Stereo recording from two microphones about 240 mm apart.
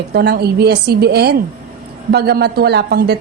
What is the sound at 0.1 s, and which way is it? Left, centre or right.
A woman's voice, right.